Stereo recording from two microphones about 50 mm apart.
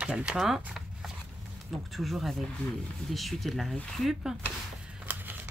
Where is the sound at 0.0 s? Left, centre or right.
Right.